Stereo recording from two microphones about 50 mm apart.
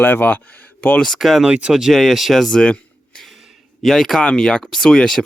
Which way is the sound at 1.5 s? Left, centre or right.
Right.